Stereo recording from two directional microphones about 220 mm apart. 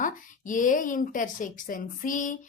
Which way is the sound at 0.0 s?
35° left (ahead or behind).